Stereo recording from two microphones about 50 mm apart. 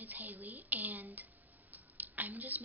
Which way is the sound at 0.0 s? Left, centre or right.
Right.